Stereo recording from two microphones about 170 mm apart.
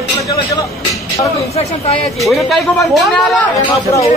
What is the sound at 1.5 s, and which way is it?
Speech, 40° left (ahead or behind).